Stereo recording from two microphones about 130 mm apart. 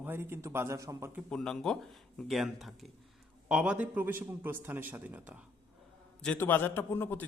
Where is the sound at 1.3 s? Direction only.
5° left (ahead or behind).